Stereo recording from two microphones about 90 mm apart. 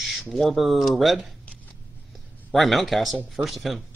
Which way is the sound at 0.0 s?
Centre (ahead or behind).